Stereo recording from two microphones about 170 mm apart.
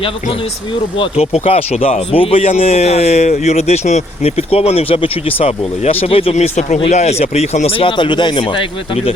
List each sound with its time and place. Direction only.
0.9 s speech: 35° left (ahead or behind)